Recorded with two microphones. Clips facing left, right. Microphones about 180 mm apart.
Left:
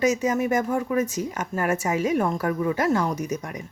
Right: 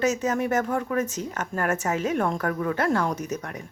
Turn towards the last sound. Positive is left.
turn(degrees=10)  # may be behind; listen again after turning